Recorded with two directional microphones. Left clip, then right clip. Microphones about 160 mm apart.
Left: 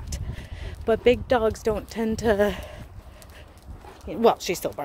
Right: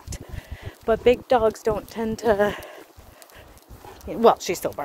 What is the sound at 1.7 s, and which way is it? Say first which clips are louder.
A woman's voice: even; 30° left (ahead or behind).